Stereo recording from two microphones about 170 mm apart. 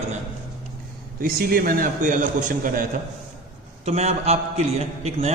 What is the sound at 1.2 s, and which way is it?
A man's voice, 60° right (ahead or behind).